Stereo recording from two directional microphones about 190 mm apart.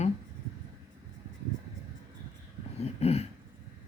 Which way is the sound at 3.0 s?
35° left (ahead or behind).